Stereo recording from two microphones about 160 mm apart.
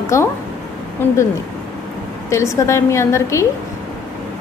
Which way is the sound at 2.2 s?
20° left (ahead or behind).